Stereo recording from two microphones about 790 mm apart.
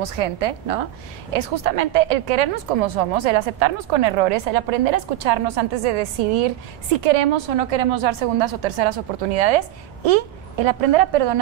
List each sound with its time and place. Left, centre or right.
0.0 s a woman's voice: right